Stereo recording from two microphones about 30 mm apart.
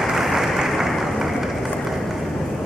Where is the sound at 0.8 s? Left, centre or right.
Centre.